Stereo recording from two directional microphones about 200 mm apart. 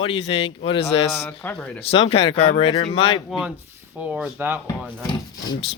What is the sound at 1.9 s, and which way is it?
Speech, 30° left (ahead or behind).